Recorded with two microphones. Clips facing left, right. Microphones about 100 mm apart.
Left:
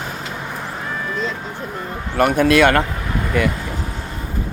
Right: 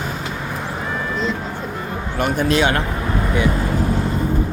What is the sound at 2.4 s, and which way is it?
Speech, 65° left (ahead or behind).